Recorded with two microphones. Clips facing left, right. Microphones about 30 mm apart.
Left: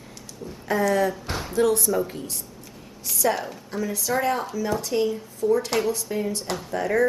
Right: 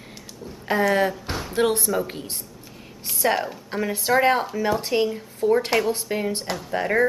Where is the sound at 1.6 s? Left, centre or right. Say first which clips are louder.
Even; right.